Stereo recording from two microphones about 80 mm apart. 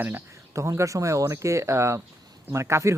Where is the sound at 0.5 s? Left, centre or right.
Right.